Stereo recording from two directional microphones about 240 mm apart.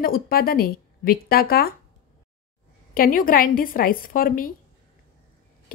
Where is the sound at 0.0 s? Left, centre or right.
Left.